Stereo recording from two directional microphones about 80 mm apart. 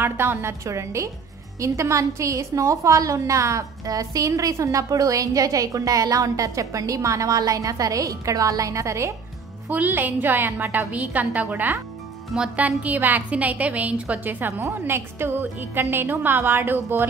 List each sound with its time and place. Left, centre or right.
0.0 s a woman's voice: right
9.7 s a woman's voice: right